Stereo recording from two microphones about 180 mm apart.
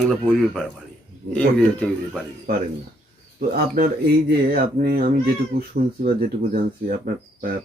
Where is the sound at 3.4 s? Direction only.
50° right (ahead or behind).